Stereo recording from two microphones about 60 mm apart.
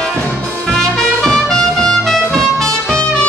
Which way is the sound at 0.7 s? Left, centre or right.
Centre.